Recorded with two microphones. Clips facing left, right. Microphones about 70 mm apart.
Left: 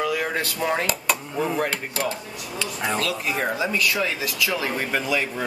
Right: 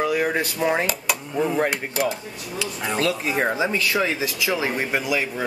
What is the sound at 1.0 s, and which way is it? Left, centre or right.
Speech, centre.